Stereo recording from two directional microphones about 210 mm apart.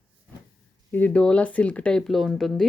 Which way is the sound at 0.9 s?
10° left (ahead or behind).